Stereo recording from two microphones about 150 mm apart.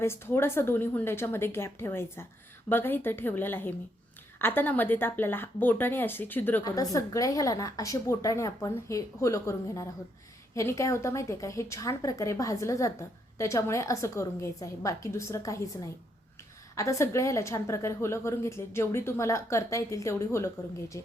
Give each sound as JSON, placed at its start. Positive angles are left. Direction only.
{"t": 0.0, "sound": "speech", "side_deg": 15}
{"t": 6.7, "sound": "a woman's voice", "side_deg": 25}
{"t": 16.7, "sound": "a woman's voice", "side_deg": 20}